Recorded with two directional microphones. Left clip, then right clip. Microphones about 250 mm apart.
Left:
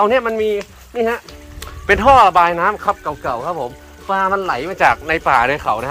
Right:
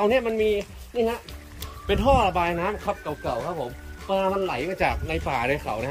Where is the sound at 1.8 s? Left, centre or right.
Left.